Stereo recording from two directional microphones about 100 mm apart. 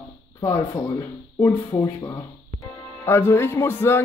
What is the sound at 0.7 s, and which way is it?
Speech, 40° left (ahead or behind).